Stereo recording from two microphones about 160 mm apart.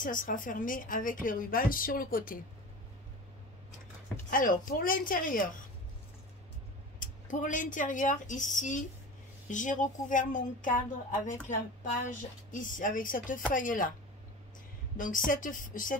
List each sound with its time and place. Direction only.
0.0 s a woman's voice: 55° left (ahead or behind)
4.3 s a woman's voice: 60° left (ahead or behind)
7.0 s a woman's voice: 55° left (ahead or behind)
15.0 s a woman's voice: 55° left (ahead or behind)